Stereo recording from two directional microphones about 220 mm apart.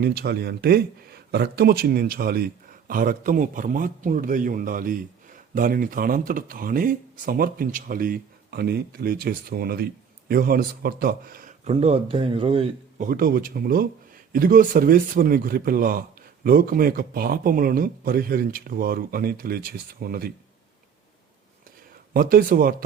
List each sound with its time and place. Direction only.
0.0 s speech: 45° right (ahead or behind); by 13.1 s 25° right (ahead or behind)
13.1 s speech: 40° right (ahead or behind)
22.1 s speech: 40° right (ahead or behind)